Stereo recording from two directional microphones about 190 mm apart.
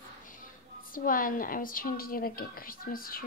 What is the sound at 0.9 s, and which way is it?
A woman's voice, 45° left (ahead or behind).